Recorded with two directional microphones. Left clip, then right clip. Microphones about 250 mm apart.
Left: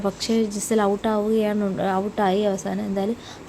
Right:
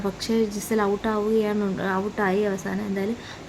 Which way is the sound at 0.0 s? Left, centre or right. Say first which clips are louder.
Left 1 dB; centre.